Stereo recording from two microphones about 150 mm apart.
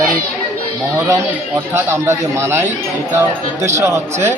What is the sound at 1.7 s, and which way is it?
Speech, 20° right (ahead or behind).